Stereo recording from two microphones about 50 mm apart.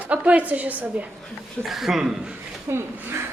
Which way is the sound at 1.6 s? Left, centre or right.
Centre.